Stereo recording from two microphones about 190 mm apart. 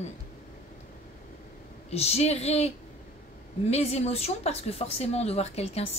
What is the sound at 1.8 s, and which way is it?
Speech, 35° left (ahead or behind).